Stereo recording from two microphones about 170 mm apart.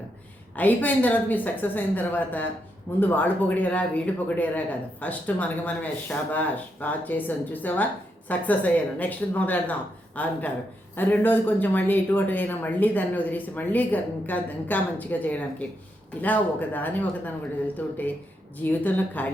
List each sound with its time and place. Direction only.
0.5 s speech: 10° left (ahead or behind)